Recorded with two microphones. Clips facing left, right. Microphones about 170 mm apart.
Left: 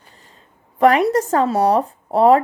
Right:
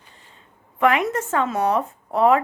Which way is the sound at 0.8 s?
35° left (ahead or behind).